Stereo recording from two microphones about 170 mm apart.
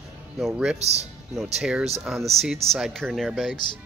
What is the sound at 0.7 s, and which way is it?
Speech, 40° right (ahead or behind).